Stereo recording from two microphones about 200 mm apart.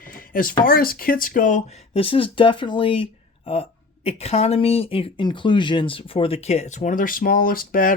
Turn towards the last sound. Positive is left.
turn(degrees=45)  # may be behind; listen again after turning